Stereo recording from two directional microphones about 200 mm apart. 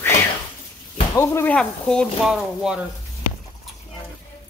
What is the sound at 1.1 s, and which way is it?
Speech, 10° left (ahead or behind).